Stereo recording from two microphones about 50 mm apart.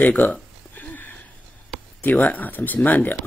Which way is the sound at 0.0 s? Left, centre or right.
Left.